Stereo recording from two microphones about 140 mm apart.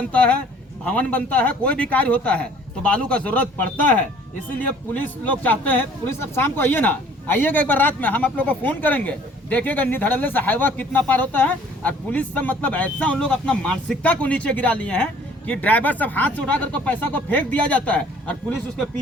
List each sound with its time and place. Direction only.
0.1 s speech: 10° left (ahead or behind)
5.0 s speech: 10° left (ahead or behind)